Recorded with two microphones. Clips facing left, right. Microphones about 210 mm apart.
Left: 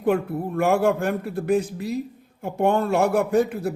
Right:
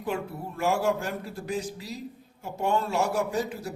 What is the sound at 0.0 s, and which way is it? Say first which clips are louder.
A man's voice: left 9 dB; 55° left (ahead or behind).